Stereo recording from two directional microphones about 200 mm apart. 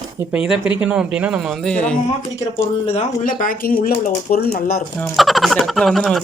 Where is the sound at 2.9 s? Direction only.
40° left (ahead or behind).